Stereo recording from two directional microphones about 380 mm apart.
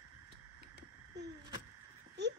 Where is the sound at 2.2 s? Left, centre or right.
Right.